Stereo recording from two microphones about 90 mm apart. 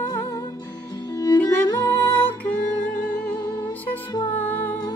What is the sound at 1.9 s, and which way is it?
Music, 25° left (ahead or behind).